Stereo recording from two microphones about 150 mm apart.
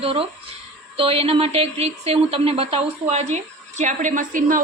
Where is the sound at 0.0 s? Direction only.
40° right (ahead or behind).